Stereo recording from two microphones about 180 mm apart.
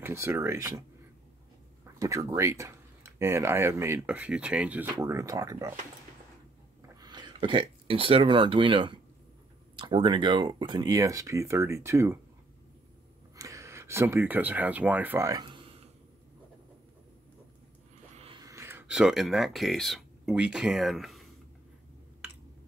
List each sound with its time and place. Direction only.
0.0 s speech: 15° right (ahead or behind)
2.0 s speech: 15° right (ahead or behind)
4.9 s speech: 20° right (ahead or behind)
7.0 s speech: 25° right (ahead or behind)
13.4 s speech: 15° right (ahead or behind)
18.1 s a sound: 30° right (ahead or behind)
18.4 s speech: 15° right (ahead or behind); by 21.2 s centre (ahead or behind)